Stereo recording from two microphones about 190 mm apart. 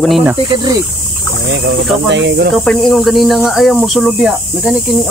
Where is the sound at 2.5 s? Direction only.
5° left (ahead or behind).